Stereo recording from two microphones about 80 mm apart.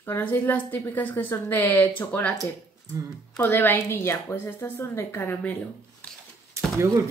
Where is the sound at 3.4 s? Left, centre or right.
Left.